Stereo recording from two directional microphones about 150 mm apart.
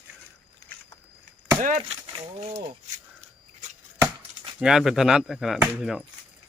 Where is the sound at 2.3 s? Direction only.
45° right (ahead or behind).